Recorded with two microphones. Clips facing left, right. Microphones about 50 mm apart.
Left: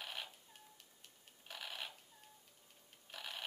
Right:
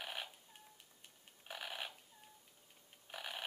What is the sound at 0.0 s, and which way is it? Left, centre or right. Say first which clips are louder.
Cat: right 2 dB; centre.